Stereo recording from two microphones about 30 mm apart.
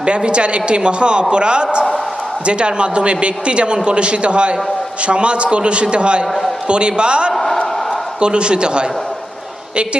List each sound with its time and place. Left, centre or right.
0.0 s speech: right
7.3 s a sound: centre
8.2 s speech: right